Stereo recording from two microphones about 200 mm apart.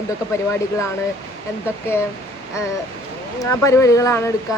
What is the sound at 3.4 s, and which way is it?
Speech, 15° left (ahead or behind).